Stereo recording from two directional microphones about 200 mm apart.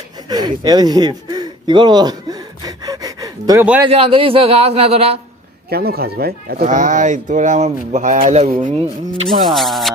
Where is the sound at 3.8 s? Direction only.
30° right (ahead or behind).